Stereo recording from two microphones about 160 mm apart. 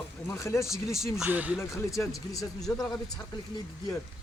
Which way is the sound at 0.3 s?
20° left (ahead or behind).